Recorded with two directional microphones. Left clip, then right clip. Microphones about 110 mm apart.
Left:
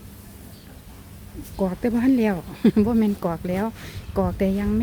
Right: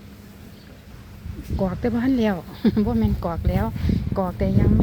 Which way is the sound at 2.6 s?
90° left.